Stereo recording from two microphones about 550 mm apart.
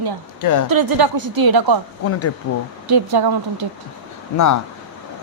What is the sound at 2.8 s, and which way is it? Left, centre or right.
Speech, right.